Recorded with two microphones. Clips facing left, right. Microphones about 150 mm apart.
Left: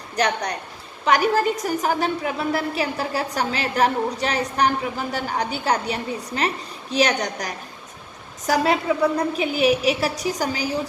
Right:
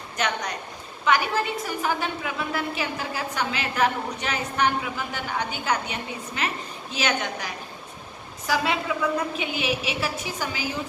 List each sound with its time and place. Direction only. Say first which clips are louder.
0.2 s a woman's voice: left 5 dB; 35° left (ahead or behind)